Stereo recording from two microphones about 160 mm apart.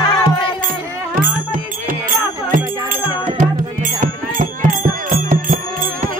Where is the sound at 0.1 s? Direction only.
30° left (ahead or behind).